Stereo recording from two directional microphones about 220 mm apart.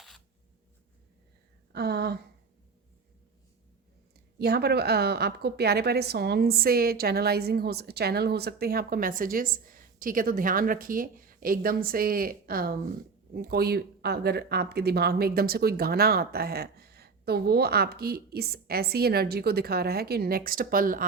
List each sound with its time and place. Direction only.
1.7 s speech: 45° right (ahead or behind)
4.4 s a woman's voice: 45° right (ahead or behind)